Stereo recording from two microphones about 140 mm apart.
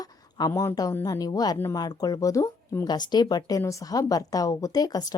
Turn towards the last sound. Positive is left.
turn(degrees=25)  # may be behind; listen again after turning